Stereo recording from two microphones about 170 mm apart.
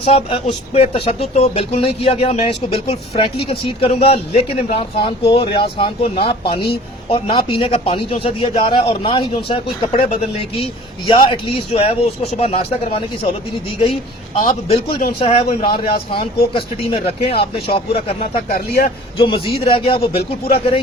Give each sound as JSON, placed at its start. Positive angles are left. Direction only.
{"t": 0.0, "sound": "speech", "side_deg": 35}
{"t": 15.2, "sound": "speech", "side_deg": 35}
{"t": 17.2, "sound": "speech", "side_deg": 70}
{"t": 17.7, "sound": "speech", "side_deg": 35}
{"t": 18.4, "sound": "speech", "side_deg": 65}
{"t": 19.1, "sound": "speech", "side_deg": 30}